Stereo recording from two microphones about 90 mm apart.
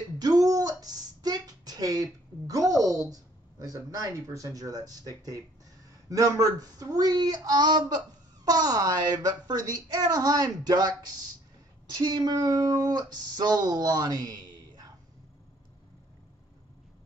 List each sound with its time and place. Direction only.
0.2 s a sound: 45° right (ahead or behind)
3.6 s speech: 40° right (ahead or behind)
6.0 s speech: 40° right (ahead or behind)